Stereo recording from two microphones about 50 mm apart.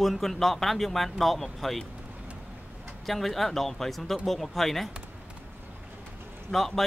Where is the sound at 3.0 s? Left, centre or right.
Centre.